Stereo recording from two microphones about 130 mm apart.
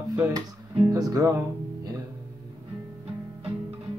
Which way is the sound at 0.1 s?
25° right (ahead or behind).